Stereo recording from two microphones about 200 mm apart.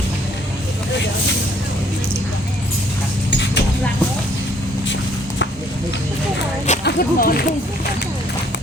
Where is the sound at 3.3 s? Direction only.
60° left (ahead or behind).